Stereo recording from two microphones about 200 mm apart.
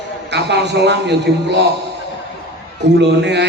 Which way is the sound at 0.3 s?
60° right (ahead or behind).